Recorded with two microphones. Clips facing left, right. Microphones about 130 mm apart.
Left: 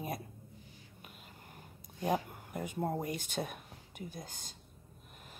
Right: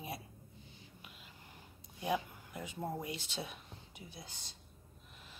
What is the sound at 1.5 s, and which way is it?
Speech, 45° left (ahead or behind).